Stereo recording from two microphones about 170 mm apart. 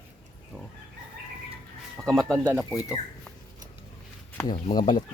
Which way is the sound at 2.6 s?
20° left (ahead or behind).